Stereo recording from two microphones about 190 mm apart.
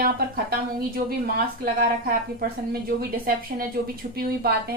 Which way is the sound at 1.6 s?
50° right (ahead or behind).